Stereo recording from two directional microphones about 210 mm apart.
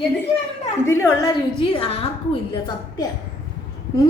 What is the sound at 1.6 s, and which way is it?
Speech, 25° left (ahead or behind).